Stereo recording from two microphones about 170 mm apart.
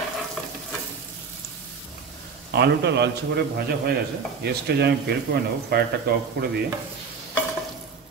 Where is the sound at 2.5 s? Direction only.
80° right.